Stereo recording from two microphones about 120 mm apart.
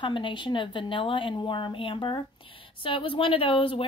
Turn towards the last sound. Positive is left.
turn(degrees=45)  # may be behind; listen again after turning